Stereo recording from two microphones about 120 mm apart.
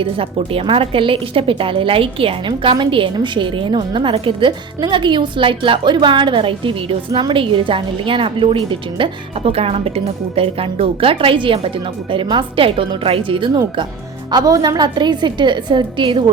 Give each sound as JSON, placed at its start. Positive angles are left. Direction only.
{"t": 0.0, "sound": "a woman's voice", "side_deg": -50}
{"t": 14.3, "sound": "a woman's voice", "side_deg": -35}